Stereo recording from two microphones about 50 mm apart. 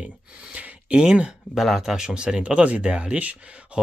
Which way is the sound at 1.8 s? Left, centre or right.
Centre.